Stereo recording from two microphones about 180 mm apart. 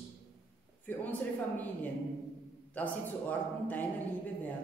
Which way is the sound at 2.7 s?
10° left (ahead or behind).